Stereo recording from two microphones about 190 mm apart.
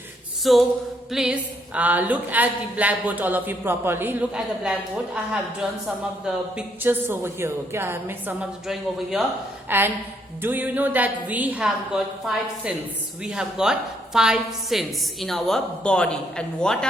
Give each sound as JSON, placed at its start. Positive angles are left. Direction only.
{"t": 0.4, "sound": "a woman's voice", "side_deg": 0}